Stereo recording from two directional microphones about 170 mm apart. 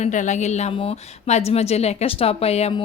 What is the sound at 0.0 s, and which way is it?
A woman's voice, 45° left (ahead or behind).